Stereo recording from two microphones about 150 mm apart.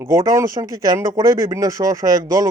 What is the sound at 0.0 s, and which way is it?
Speech, 20° right (ahead or behind).